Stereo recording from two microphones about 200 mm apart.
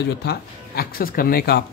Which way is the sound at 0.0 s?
55° left (ahead or behind).